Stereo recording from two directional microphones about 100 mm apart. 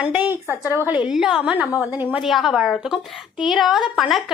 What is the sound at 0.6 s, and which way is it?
Speech, 30° left (ahead or behind).